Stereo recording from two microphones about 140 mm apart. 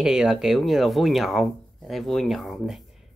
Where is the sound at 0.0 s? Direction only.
5° right (ahead or behind).